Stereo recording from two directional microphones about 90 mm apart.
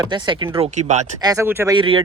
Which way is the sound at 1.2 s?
40° right (ahead or behind).